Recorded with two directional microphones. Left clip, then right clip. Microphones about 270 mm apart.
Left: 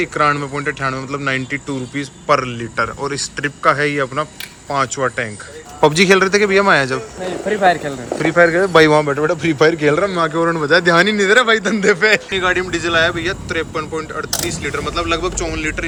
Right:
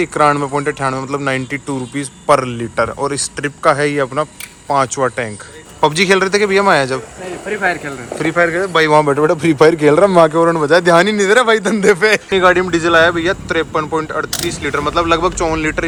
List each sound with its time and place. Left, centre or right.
0.0 s speech: centre
5.8 s a man's voice: centre
7.4 s speech: left
8.2 s a man's voice: centre
9.0 s speech: centre